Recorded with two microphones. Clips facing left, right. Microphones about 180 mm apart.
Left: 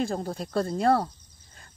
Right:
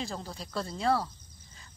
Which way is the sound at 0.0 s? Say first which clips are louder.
Left 9 dB; 55° left (ahead or behind).